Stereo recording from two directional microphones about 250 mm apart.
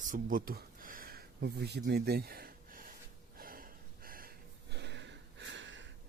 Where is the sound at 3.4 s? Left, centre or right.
Right.